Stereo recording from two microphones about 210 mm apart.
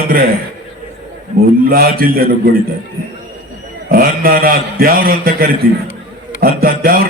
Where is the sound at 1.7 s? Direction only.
45° right (ahead or behind).